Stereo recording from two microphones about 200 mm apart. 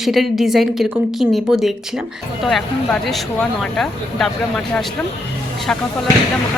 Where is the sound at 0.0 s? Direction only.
Centre (ahead or behind).